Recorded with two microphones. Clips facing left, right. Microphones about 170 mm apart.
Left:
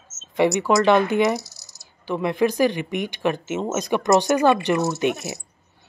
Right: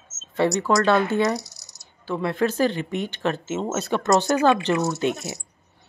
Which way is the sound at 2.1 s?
15° left (ahead or behind).